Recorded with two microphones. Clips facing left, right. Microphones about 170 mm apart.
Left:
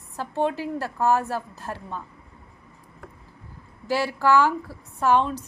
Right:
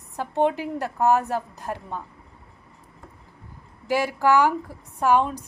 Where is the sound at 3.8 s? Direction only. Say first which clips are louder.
Right 1 dB; 15° right (ahead or behind).